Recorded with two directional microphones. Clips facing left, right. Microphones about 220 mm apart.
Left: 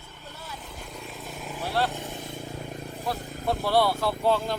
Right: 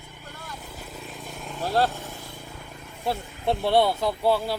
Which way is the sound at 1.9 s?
15° left (ahead or behind).